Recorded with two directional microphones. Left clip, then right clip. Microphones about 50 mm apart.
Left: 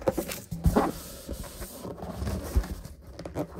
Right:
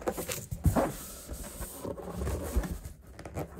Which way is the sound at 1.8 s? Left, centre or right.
Left.